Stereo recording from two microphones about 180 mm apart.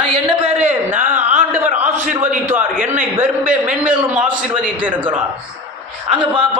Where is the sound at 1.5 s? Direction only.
10° right (ahead or behind).